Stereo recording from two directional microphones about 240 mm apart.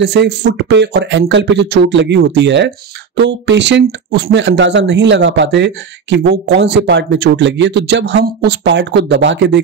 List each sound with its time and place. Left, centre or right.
0.0 s speech: right